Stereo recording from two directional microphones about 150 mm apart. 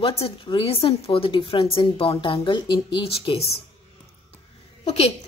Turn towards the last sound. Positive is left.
turn(degrees=45)  # may be behind; listen again after turning